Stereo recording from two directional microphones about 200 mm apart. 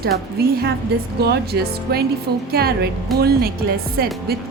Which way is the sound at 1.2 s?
55° right (ahead or behind).